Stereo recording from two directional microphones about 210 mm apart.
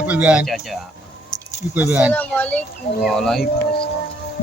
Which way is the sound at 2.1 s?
10° left (ahead or behind).